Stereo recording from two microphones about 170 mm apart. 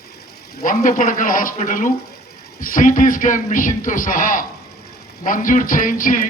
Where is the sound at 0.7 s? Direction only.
45° left (ahead or behind).